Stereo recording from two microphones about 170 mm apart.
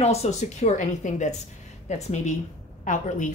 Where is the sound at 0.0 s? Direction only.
40° left (ahead or behind).